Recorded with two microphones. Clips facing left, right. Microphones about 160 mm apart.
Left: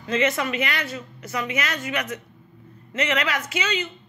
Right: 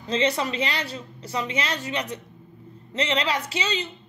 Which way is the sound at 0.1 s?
30° right (ahead or behind).